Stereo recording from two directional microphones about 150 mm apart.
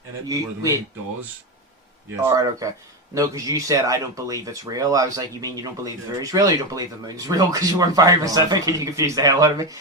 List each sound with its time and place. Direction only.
2.2 s speech: 20° right (ahead or behind)